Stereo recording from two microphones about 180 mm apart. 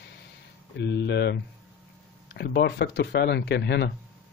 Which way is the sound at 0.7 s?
75° left (ahead or behind).